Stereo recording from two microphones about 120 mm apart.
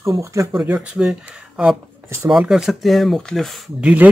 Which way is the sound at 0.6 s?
10° right (ahead or behind).